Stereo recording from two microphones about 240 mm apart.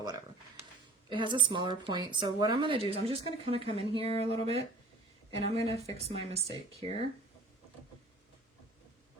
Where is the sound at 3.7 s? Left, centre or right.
Left.